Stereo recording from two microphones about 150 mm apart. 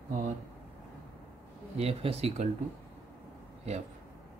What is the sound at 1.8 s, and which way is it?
Speech, 40° right (ahead or behind).